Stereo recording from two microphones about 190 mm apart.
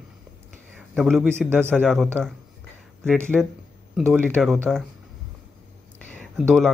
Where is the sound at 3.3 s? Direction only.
Centre (ahead or behind).